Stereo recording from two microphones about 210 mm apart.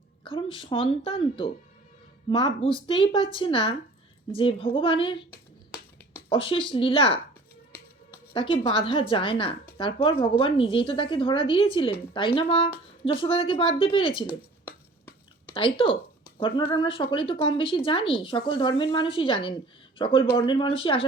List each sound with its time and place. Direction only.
0.3 s a woman's voice: 25° left (ahead or behind)
6.2 s a woman's voice: 25° left (ahead or behind)
8.3 s a woman's voice: 25° left (ahead or behind)
15.5 s a woman's voice: 25° left (ahead or behind)